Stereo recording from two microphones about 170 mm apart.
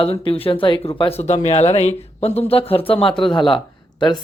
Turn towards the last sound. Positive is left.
turn(degrees=30)  # may be behind; listen again after turning